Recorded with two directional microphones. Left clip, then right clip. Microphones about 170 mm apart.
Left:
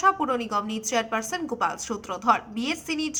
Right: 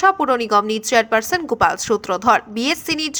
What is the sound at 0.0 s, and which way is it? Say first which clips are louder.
A woman's voice: right 7 dB; 35° right (ahead or behind).